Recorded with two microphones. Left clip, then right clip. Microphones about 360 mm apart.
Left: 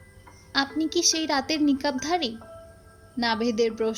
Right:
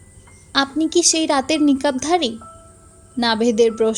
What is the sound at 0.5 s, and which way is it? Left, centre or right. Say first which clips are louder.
A woman's voice: right 7 dB; left.